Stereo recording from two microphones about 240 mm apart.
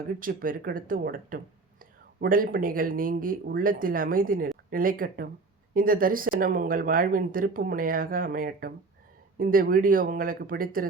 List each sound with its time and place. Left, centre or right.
0.2 s speech: right